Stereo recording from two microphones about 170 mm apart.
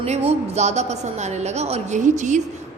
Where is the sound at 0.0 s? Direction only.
35° right (ahead or behind).